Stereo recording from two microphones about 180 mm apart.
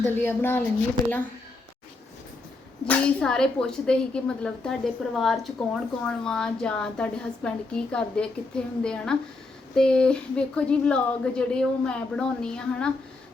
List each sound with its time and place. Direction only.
0.0 s speech: 10° left (ahead or behind)
2.8 s a woman's voice: 5° left (ahead or behind)